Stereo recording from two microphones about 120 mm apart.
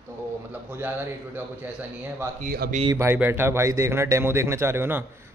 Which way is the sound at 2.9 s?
20° right (ahead or behind).